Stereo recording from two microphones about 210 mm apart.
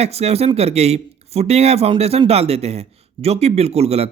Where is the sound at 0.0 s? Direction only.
30° right (ahead or behind).